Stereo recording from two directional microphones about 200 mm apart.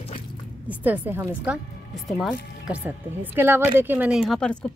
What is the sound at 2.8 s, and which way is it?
Speech, 10° right (ahead or behind).